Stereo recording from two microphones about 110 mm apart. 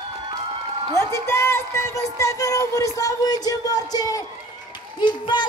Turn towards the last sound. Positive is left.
turn(degrees=45)  # may be behind; listen again after turning